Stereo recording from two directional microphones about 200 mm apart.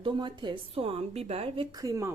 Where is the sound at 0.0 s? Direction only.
25° right (ahead or behind).